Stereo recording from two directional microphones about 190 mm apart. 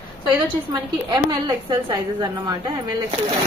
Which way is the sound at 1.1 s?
20° right (ahead or behind).